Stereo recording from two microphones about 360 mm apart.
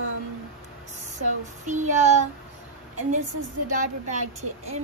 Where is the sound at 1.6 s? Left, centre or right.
Centre.